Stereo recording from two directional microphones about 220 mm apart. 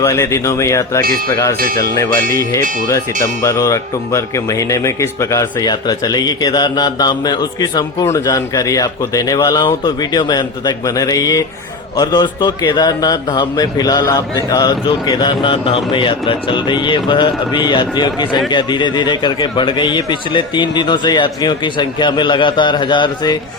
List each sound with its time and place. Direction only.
0.0 s speech: 15° left (ahead or behind)
1.0 s speech: 40° right (ahead or behind)
3.4 s a man's voice: 15° left (ahead or behind)